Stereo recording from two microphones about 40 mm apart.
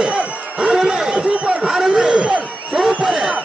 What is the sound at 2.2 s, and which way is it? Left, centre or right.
Crowd, right.